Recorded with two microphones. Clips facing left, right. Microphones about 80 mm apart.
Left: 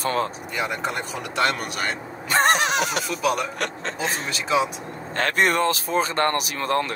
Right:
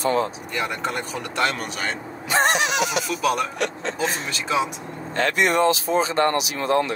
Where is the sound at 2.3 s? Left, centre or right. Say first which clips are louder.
Left 1 dB; left.